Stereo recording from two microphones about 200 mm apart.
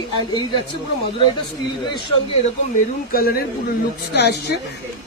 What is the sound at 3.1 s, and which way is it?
A man's voice, 50° left (ahead or behind).